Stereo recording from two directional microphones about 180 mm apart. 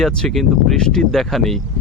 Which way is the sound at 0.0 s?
Centre (ahead or behind).